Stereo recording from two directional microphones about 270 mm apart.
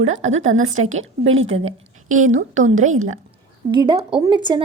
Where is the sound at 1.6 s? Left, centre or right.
Right.